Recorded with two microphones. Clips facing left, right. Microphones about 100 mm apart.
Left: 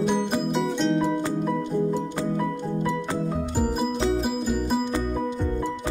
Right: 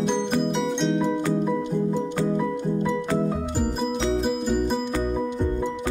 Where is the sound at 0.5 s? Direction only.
Centre (ahead or behind).